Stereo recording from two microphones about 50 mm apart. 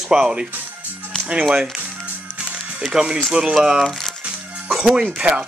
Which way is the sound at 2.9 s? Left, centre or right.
Centre.